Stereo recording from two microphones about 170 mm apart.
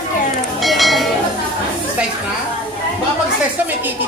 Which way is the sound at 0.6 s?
Centre (ahead or behind).